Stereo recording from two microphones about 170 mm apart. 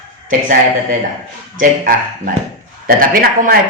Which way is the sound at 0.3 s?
50° right (ahead or behind).